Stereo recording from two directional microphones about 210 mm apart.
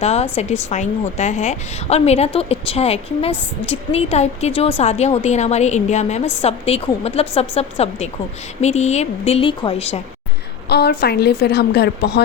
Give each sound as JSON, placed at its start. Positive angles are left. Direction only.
{"t": 0.0, "sound": "a woman's voice", "side_deg": 30}
{"t": 10.7, "sound": "a woman's voice", "side_deg": 50}